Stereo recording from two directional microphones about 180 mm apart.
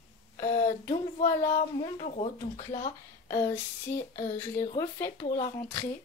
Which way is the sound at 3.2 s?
20° left (ahead or behind).